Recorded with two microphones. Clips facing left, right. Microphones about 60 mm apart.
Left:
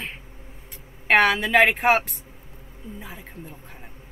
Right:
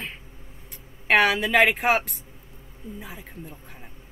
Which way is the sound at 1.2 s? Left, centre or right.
Centre.